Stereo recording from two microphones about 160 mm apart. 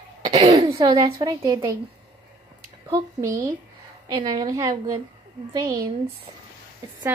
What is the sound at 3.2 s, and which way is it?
A woman's voice, 15° right (ahead or behind).